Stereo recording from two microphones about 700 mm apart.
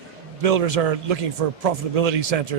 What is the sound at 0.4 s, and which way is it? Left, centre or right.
A man's voice, right.